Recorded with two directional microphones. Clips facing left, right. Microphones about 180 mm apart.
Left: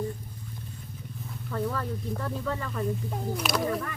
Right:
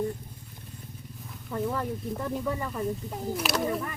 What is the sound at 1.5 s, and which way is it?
Speech, 15° right (ahead or behind).